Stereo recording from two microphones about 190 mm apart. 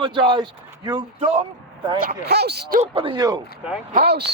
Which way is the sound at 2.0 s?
60° right (ahead or behind).